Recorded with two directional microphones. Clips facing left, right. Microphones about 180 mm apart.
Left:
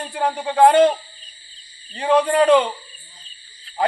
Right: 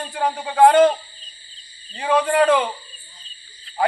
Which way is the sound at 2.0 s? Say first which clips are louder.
Left 1 dB; 20° left (ahead or behind).